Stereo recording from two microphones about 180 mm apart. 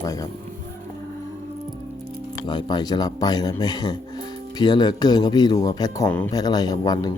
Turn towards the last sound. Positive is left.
turn(degrees=20)  # may be behind; listen again after turning